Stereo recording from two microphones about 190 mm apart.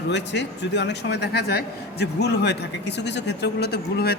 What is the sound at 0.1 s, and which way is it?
Speech, 65° left (ahead or behind).